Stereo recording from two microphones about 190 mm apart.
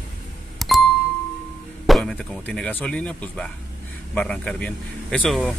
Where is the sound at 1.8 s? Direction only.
Centre (ahead or behind).